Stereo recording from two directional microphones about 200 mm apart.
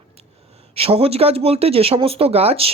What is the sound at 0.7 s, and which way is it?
Speech, 30° right (ahead or behind).